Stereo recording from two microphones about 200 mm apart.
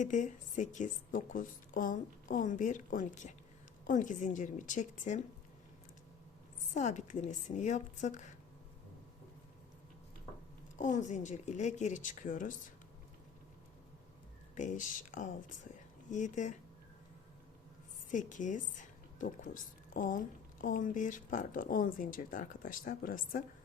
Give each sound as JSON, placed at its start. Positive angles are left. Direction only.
{"t": 0.0, "sound": "a woman's voice", "side_deg": 40}
{"t": 6.7, "sound": "a woman's voice", "side_deg": 40}
{"t": 10.8, "sound": "a woman's voice", "side_deg": 40}
{"t": 14.5, "sound": "a woman's voice", "side_deg": 40}
{"t": 18.1, "sound": "a woman's voice", "side_deg": 40}